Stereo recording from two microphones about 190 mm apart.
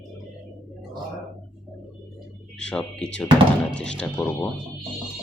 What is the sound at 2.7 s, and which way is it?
Speech, 5° left (ahead or behind).